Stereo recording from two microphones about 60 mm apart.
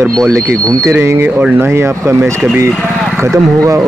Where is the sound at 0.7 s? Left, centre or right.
Right.